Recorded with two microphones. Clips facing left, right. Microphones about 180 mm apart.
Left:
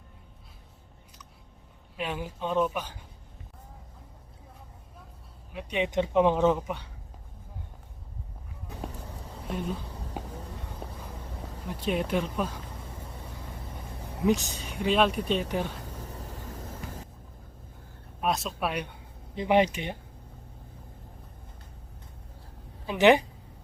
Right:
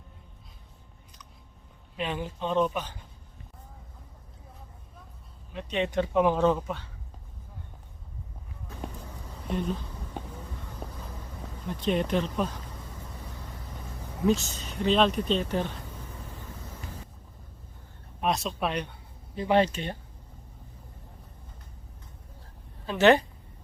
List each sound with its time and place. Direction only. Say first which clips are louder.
2.0 s speech: right 1 dB; 10° left (ahead or behind)
5.5 s speech: even; 15° left (ahead or behind)
9.5 s a sound: right 3 dB; 10° left (ahead or behind)
11.8 s speech: right 1 dB; 5° left (ahead or behind)
14.3 s speech: even; 15° left (ahead or behind)
18.2 s speech: right 1 dB; centre (ahead or behind)
22.9 s speech: even; 15° left (ahead or behind)